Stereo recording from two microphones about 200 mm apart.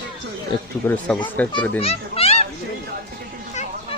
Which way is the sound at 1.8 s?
30° left (ahead or behind).